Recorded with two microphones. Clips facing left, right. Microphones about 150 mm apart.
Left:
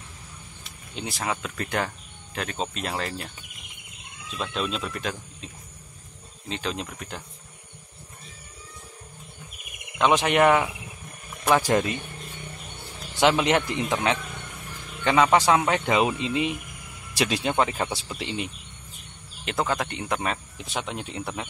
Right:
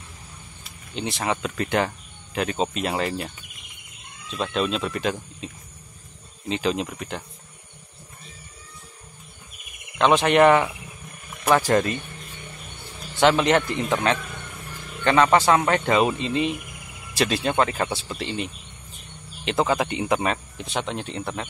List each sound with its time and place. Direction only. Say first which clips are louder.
0.9 s speech: right 4 dB; centre (ahead or behind)
4.4 s speech: right 5 dB; centre (ahead or behind)
6.5 s speech: right 6 dB; 5° right (ahead or behind)
9.9 s speech: right 3 dB; 10° left (ahead or behind)
13.2 s speech: right 2 dB; 10° left (ahead or behind)
19.4 s speech: right 4 dB; centre (ahead or behind)